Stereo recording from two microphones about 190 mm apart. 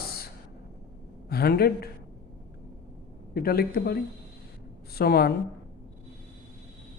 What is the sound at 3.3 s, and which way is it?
A woman's voice, 55° left (ahead or behind).